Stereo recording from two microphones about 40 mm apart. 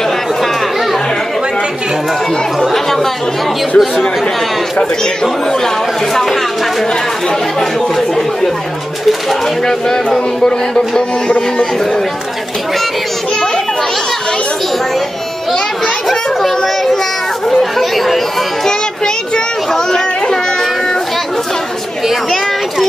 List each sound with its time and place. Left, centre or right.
2.6 s chatter: centre
9.7 s speech: centre
16.1 s speech: centre
17.5 s chatter: centre
19.3 s children playing: centre